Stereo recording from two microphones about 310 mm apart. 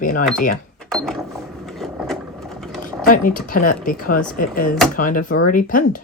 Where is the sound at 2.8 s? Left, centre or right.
Left.